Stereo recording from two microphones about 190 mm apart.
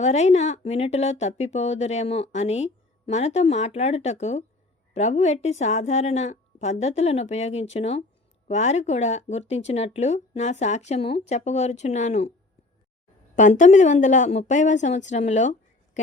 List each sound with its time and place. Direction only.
0.0 s a woman's voice: 35° left (ahead or behind)
13.3 s a woman's voice: 40° left (ahead or behind)